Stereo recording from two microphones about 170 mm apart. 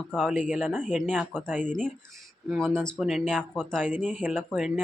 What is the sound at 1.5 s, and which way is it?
Speech, 10° right (ahead or behind).